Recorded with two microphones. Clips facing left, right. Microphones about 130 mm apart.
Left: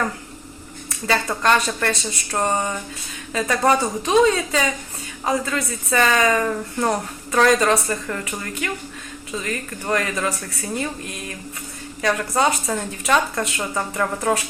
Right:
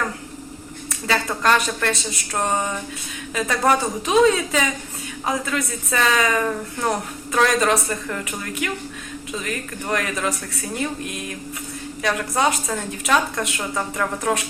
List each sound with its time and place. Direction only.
1.0 s a woman's voice: centre (ahead or behind)
12.0 s a woman's voice: centre (ahead or behind)